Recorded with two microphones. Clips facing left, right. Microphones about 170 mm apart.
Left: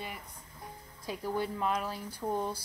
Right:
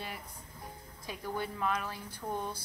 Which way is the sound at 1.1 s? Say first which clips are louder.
Left 4 dB; 30° left (ahead or behind).